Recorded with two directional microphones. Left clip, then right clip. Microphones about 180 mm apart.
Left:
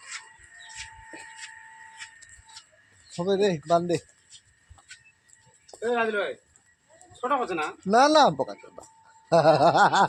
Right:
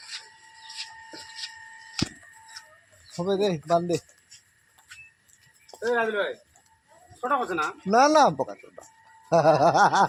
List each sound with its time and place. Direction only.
3.2 s speech: 5° right (ahead or behind)
5.7 s speech: 15° left (ahead or behind)
7.2 s speech: 35° left (ahead or behind)
7.9 s speech: 5° right (ahead or behind)